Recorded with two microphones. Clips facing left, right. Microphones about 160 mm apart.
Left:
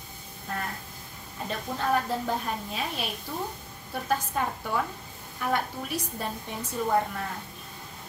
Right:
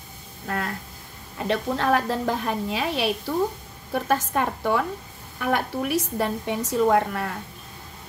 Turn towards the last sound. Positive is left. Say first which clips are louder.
# right 6 dB
turn(degrees=-70)  # may be behind; listen again after turning